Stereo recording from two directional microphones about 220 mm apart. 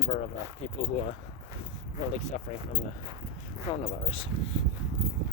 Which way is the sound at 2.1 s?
30° left (ahead or behind).